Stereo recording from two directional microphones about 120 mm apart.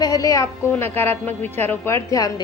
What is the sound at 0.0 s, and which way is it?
A woman's voice, 30° left (ahead or behind).